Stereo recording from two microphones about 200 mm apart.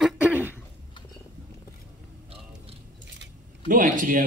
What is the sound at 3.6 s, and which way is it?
Speech, 40° right (ahead or behind).